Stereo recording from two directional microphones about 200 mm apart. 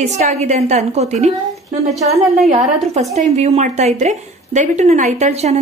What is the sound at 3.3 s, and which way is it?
A woman's voice, 35° right (ahead or behind).